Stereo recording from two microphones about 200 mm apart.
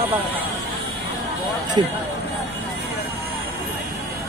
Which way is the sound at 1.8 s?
25° right (ahead or behind).